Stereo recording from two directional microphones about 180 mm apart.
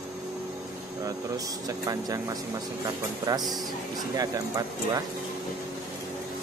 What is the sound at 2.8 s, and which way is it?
Speech, 20° right (ahead or behind).